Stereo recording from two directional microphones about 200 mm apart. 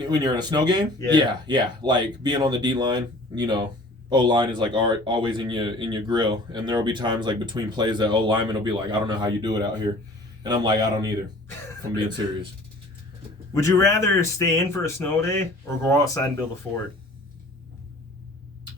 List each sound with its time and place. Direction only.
0.1 s speech: 20° right (ahead or behind)
13.5 s speech: 15° left (ahead or behind)